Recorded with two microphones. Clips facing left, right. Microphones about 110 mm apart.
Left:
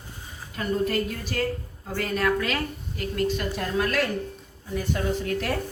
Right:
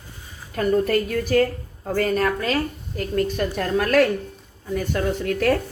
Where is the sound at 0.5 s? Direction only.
50° right (ahead or behind).